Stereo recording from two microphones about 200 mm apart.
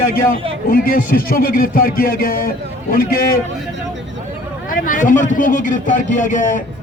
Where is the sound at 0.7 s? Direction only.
45° left (ahead or behind).